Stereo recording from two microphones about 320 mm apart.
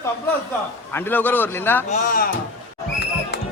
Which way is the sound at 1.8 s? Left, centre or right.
Left.